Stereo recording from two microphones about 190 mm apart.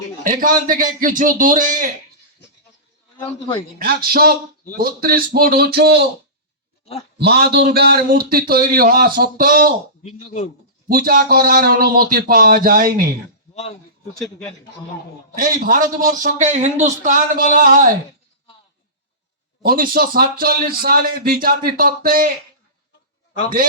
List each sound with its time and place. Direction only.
0.3 s a man's voice: 45° right (ahead or behind)
3.8 s a man's voice: 55° right (ahead or behind)
7.2 s a man's voice: 55° right (ahead or behind)
10.0 s speech: 35° left (ahead or behind)
10.8 s a man's voice: 50° right (ahead or behind)
13.5 s speech: 35° left (ahead or behind)
15.4 s a man's voice: 45° right (ahead or behind)
19.6 s a man's voice: 50° right (ahead or behind)